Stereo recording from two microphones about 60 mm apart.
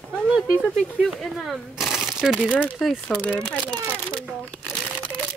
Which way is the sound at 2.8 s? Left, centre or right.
Centre.